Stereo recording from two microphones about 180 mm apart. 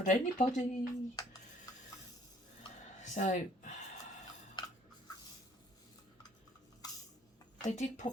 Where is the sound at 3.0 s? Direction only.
45° left (ahead or behind).